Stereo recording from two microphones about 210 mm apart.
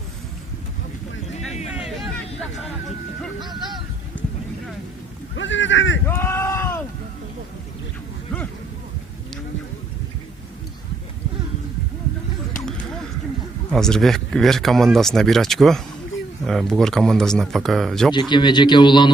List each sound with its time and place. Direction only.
1.7 s vehicle: 5° right (ahead or behind)
4.1 s clip-clop: 60° left (ahead or behind)
5.4 s boat: 60° left (ahead or behind)
6.1 s a sound: 10° left (ahead or behind)
12.6 s a sound: 5° left (ahead or behind)
13.7 s speech: 5° left (ahead or behind)
18.1 s a man's voice: 20° left (ahead or behind)